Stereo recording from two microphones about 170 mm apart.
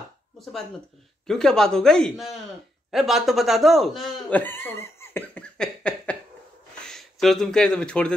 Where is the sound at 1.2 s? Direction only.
5° left (ahead or behind).